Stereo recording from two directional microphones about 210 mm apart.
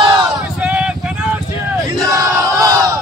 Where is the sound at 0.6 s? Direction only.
5° right (ahead or behind).